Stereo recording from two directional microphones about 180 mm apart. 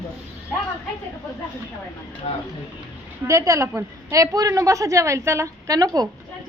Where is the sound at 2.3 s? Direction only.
35° left (ahead or behind).